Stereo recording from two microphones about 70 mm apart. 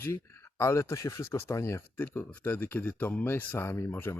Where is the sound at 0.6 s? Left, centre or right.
Left.